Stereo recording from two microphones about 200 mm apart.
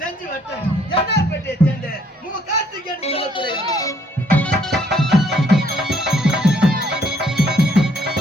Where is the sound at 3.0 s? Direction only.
30° left (ahead or behind).